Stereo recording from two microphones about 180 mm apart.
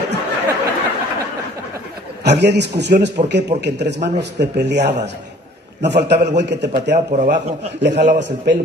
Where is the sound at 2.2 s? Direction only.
70° right (ahead or behind).